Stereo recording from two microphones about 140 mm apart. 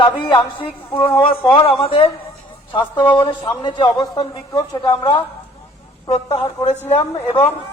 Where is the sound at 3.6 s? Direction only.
35° left (ahead or behind).